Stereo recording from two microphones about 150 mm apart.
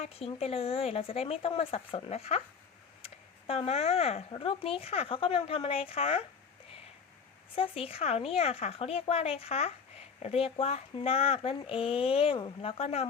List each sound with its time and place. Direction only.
0.0 s speech: 40° left (ahead or behind)
7.5 s speech: 40° left (ahead or behind)